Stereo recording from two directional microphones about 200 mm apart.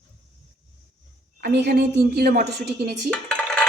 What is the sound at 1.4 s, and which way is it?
A woman's voice, 55° right (ahead or behind).